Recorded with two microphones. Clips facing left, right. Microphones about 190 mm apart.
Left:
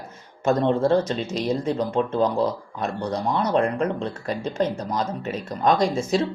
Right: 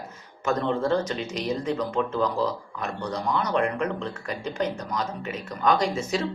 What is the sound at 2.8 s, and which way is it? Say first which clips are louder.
Speech: left 4 dB; 30° left (ahead or behind).